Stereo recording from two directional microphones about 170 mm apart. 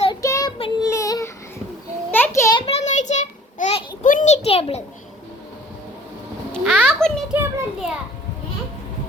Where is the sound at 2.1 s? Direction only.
15° left (ahead or behind).